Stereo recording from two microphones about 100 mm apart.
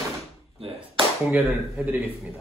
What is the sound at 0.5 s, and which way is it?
Tap, 60° right (ahead or behind).